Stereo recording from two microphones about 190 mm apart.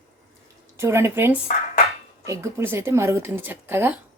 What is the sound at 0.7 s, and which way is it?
Speech, 15° right (ahead or behind).